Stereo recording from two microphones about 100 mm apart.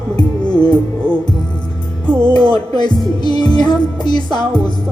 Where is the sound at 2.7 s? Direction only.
45° left (ahead or behind).